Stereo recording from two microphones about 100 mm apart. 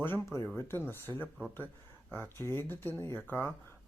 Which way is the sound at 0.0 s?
25° left (ahead or behind).